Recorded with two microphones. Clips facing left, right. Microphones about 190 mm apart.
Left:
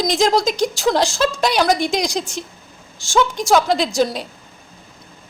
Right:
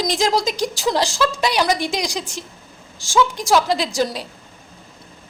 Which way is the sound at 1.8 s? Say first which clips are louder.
Left 4 dB; 10° right (ahead or behind).